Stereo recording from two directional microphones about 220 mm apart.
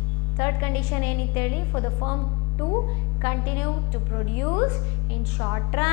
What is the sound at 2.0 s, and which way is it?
Speech, 25° left (ahead or behind).